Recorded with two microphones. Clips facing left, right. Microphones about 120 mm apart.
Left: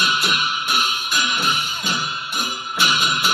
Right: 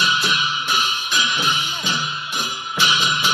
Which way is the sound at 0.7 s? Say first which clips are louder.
Even; 5° left (ahead or behind).